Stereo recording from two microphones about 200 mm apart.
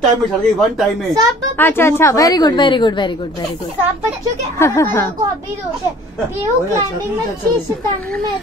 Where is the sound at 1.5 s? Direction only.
10° left (ahead or behind).